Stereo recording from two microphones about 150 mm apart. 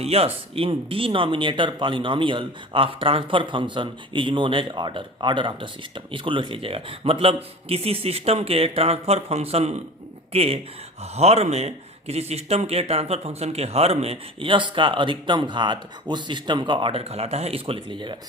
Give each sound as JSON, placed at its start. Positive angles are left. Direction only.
{"t": 0.0, "sound": "speech", "side_deg": -40}